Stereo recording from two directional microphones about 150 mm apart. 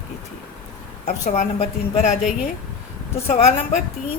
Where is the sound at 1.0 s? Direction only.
55° left (ahead or behind).